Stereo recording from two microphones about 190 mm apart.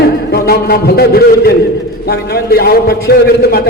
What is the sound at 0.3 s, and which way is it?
A man's voice, 55° left (ahead or behind).